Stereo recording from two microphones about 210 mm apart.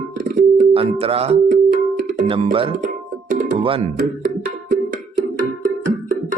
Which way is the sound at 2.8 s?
40° right (ahead or behind).